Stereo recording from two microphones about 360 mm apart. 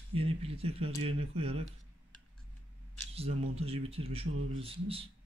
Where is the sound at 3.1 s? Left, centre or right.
Centre.